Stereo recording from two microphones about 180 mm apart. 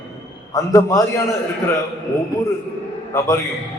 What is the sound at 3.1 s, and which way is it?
Speech, 20° left (ahead or behind).